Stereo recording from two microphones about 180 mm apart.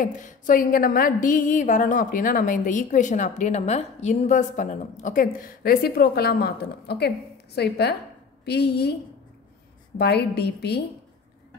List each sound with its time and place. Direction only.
0.0 s a woman's voice: 50° left (ahead or behind); by 8.9 s 65° left (ahead or behind)
9.9 s a woman's voice: 65° left (ahead or behind)